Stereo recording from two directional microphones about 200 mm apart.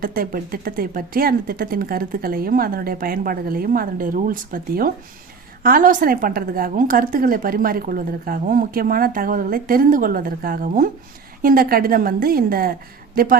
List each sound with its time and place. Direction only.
0.0 s a woman's voice: 45° right (ahead or behind)